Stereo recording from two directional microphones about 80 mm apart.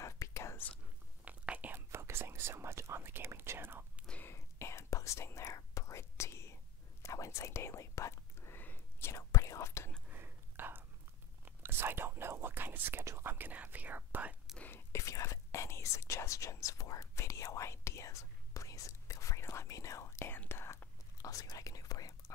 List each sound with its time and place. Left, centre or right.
0.0 s whispering: left
1.2 s whispering: centre
1.9 s whispering: right
4.2 s whispering: left
9.1 s whispering: left
10.0 s whispering: right
13.0 s speech: right
14.9 s whispering: left
21.2 s speech: left